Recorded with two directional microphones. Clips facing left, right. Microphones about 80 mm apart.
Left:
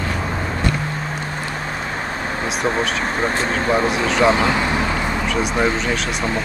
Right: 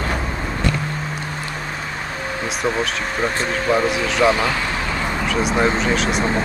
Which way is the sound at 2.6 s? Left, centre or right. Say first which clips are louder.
Left 1 dB; left.